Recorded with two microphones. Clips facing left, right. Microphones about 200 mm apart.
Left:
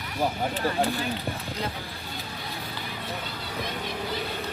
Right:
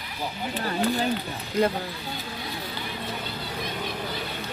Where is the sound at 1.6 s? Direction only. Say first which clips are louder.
Right 13 dB; 50° right (ahead or behind).